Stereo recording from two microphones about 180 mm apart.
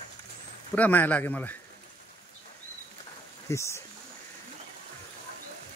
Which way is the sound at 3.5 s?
15° left (ahead or behind).